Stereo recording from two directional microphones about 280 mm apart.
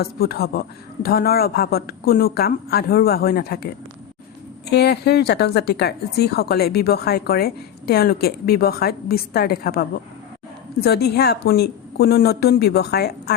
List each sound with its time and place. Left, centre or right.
0.0 s speech: left
4.7 s speech: left